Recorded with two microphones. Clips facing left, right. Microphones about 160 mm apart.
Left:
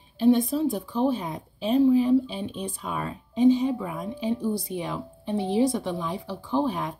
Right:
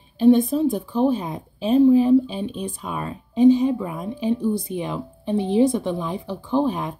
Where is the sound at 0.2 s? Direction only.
50° right (ahead or behind).